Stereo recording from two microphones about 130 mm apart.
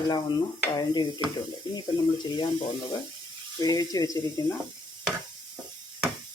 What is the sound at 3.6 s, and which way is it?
Speech, 30° left (ahead or behind).